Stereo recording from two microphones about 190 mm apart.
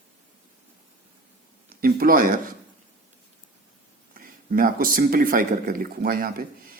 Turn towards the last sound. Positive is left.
turn(degrees=-50)  # may be behind; listen again after turning